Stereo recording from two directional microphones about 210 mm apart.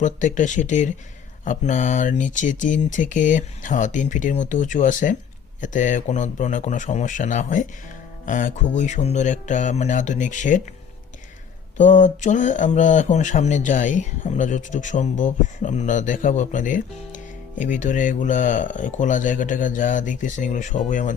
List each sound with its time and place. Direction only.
0.0 s speech: 35° left (ahead or behind)
11.8 s speech: 35° left (ahead or behind)